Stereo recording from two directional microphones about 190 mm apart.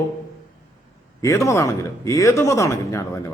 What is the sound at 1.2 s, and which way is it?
Speech, 15° left (ahead or behind).